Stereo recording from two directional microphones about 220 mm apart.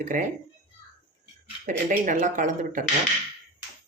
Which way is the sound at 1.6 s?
35° right (ahead or behind).